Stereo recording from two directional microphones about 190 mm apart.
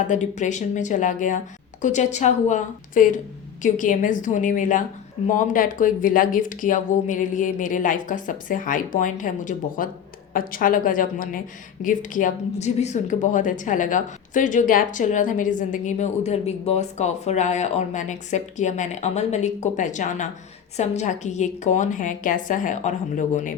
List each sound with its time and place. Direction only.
0.1 s a woman's voice: 40° left (ahead or behind)